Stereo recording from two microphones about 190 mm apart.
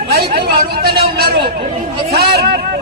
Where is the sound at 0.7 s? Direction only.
55° right (ahead or behind).